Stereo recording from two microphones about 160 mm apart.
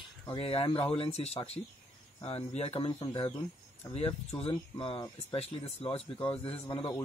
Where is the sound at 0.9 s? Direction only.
40° left (ahead or behind).